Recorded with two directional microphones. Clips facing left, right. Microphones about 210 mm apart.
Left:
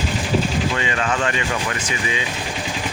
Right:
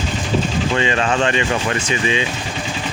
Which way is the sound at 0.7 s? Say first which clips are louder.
Right 4 dB; 30° right (ahead or behind).